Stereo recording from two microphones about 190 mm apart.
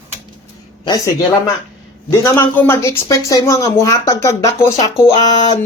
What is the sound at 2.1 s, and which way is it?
Speech, 15° left (ahead or behind).